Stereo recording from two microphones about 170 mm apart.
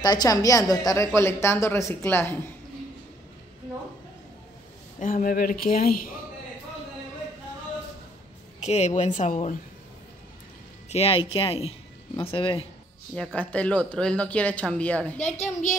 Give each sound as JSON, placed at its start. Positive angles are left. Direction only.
{"t": 0.0, "sound": "a woman's voice", "side_deg": 25}
{"t": 5.0, "sound": "speech", "side_deg": 55}
{"t": 8.5, "sound": "speech", "side_deg": 40}
{"t": 10.9, "sound": "speech", "side_deg": 35}
{"t": 13.1, "sound": "a woman's voice", "side_deg": 5}
{"t": 15.1, "sound": "speech", "side_deg": 40}